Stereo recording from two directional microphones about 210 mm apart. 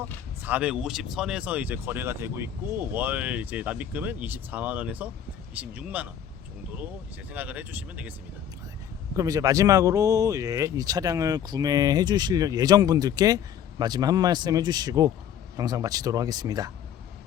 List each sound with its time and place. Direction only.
0.4 s speech: 5° right (ahead or behind)
7.3 s speech: 10° right (ahead or behind)
9.1 s speech: 15° right (ahead or behind)